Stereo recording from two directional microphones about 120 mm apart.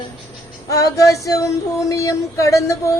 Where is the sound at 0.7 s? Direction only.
25° left (ahead or behind).